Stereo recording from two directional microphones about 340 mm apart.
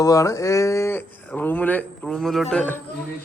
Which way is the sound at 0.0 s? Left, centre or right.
Centre.